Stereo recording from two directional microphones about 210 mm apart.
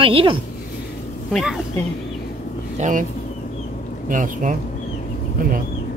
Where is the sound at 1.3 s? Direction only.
Centre (ahead or behind).